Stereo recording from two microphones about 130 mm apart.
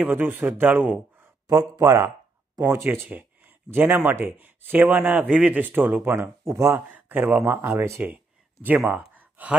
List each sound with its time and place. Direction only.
0.0 s a man's voice: 15° right (ahead or behind)
3.1 s a sound: 15° right (ahead or behind)
3.7 s a man's voice: 15° right (ahead or behind)